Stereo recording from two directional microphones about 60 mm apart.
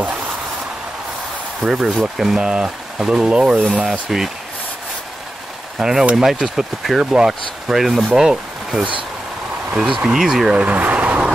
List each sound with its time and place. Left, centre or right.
1.6 s speech: centre
5.8 s speech: centre
10.5 s vehicle: right